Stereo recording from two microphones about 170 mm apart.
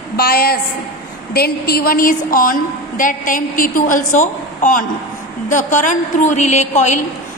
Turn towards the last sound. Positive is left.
turn(degrees=45)  # may be behind; listen again after turning